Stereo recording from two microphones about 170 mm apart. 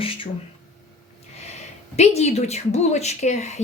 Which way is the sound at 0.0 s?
30° left (ahead or behind).